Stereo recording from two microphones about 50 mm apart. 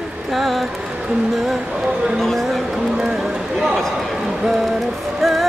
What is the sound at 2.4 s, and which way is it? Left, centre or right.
Speech, centre.